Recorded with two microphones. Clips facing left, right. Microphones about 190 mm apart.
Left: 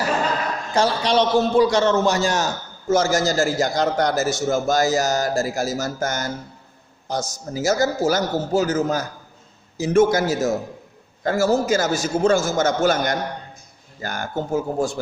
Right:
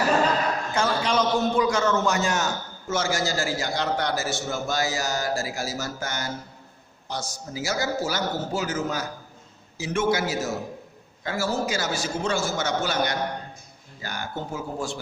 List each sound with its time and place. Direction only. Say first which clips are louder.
0.7 s a man's voice: left 7 dB; 35° left (ahead or behind)